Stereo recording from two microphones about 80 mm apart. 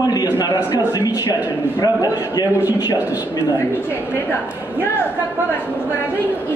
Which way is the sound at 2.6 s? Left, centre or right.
Right.